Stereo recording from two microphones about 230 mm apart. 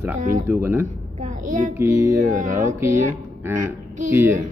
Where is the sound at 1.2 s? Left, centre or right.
Right.